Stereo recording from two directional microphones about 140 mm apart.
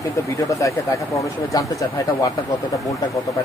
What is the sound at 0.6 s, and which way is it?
Speech, 25° left (ahead or behind).